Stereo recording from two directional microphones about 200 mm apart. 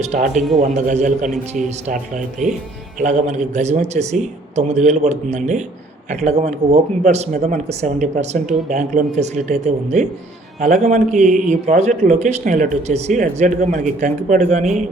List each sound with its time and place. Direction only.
0.0 s speech: 35° right (ahead or behind)